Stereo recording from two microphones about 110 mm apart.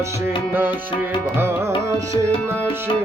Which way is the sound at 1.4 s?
20° right (ahead or behind).